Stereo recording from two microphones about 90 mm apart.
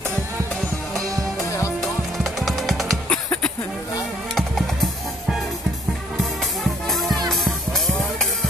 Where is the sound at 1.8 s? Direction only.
Centre (ahead or behind).